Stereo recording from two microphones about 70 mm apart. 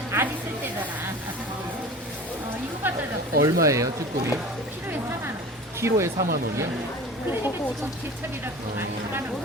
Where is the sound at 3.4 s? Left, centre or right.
Right.